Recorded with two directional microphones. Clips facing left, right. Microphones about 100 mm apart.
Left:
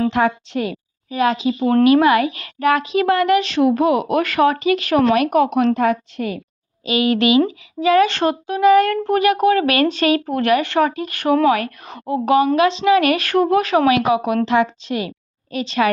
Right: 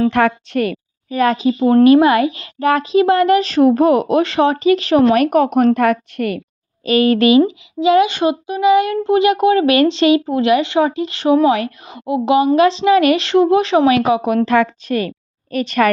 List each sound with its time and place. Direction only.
0.1 s a woman's voice: 60° right (ahead or behind)
1.1 s a woman's voice: 45° right (ahead or behind)
1.6 s speech: 30° right (ahead or behind)
4.1 s speech: 25° right (ahead or behind); by 6.4 s 60° right (ahead or behind)
6.8 s a woman's voice: 45° right (ahead or behind)
7.3 s a child's voice: 25° right (ahead or behind)
11.9 s a woman's voice: 15° right (ahead or behind)
12.5 s a child's voice: 30° right (ahead or behind)
14.4 s a woman's voice: 50° right (ahead or behind)